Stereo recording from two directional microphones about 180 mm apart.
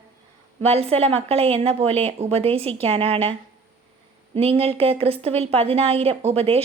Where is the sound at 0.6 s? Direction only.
35° right (ahead or behind).